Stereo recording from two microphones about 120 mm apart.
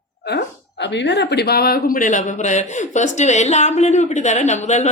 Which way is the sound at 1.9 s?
90° left.